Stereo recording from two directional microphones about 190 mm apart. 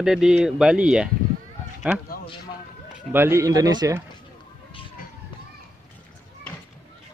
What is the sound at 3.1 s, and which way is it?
Speech, 10° right (ahead or behind).